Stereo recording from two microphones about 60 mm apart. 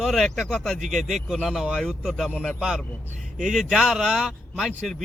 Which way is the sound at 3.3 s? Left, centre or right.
Centre.